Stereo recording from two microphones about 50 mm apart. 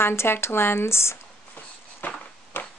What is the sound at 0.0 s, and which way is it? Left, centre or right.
Speech, left.